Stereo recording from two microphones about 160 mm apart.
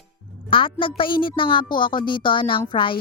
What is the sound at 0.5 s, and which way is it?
A woman's voice, 30° left (ahead or behind).